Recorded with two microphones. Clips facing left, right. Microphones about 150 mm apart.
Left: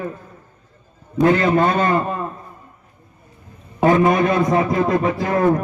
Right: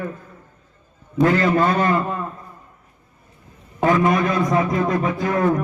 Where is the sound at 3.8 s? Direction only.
25° left (ahead or behind).